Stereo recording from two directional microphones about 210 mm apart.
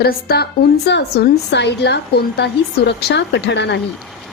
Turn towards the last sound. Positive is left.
turn(degrees=55)  # may be behind; listen again after turning